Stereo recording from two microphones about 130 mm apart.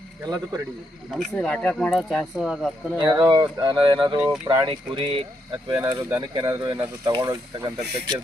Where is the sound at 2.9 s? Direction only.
40° right (ahead or behind).